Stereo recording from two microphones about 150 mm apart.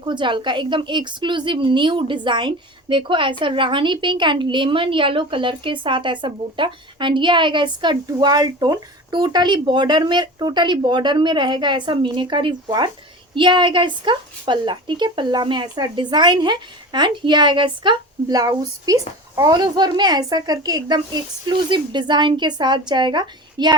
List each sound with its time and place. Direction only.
0.0 s a woman's voice: 30° right (ahead or behind)